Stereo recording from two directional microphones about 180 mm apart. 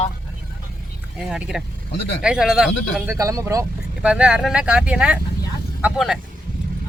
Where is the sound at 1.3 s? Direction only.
5° right (ahead or behind).